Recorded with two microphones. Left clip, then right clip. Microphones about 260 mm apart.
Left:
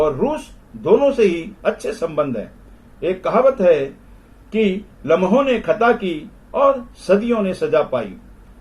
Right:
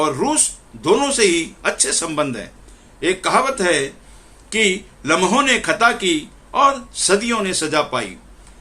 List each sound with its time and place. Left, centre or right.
0.0 s a man's voice: right
7.1 s a man's voice: right